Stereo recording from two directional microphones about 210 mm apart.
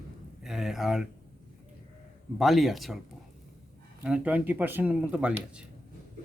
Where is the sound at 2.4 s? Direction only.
Centre (ahead or behind).